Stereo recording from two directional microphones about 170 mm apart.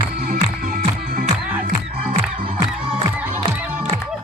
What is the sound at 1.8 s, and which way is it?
Music, 35° right (ahead or behind).